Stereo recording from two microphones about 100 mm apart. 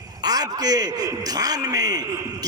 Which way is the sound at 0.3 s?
40° right (ahead or behind).